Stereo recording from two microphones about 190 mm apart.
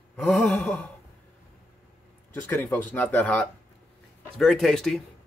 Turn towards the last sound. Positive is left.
turn(degrees=0)  # may be behind; listen again after turning